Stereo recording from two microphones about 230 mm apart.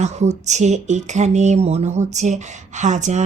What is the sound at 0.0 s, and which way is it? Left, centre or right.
Speech, right.